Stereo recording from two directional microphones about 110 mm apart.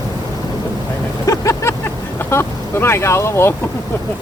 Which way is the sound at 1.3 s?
30° left (ahead or behind).